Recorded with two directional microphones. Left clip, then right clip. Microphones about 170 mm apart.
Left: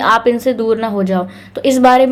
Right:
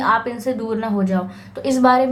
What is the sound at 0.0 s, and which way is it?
A woman's voice, 40° left (ahead or behind).